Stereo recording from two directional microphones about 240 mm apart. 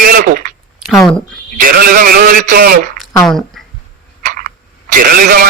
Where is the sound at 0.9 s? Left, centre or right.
Centre.